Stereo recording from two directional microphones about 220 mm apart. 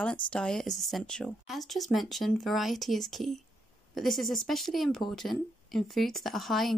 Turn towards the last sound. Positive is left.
turn(degrees=0)  # may be behind; listen again after turning